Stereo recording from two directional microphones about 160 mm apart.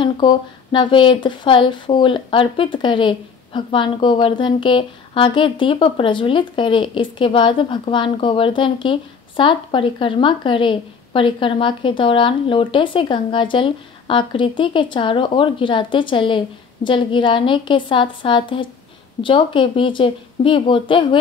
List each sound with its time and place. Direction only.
0.0 s speech: 30° left (ahead or behind)